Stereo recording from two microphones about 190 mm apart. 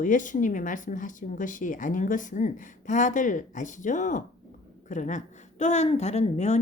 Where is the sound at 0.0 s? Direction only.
45° left (ahead or behind).